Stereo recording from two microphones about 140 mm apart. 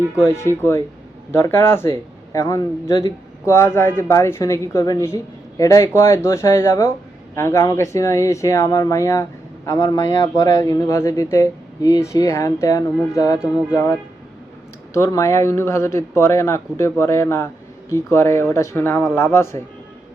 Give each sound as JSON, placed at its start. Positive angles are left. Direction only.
{"t": 0.2, "sound": "speech", "side_deg": 20}
{"t": 13.4, "sound": "speech", "side_deg": -10}
{"t": 14.9, "sound": "a man's voice", "side_deg": 20}